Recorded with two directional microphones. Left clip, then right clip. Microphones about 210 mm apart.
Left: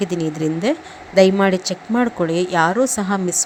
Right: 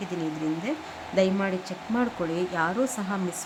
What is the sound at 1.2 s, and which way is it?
Speech, 30° left (ahead or behind).